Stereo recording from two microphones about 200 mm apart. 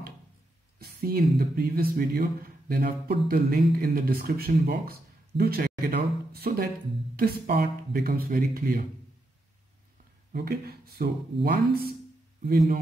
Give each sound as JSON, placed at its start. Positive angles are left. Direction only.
{"t": 0.7, "sound": "speech", "side_deg": -50}
{"t": 10.3, "sound": "speech", "side_deg": -50}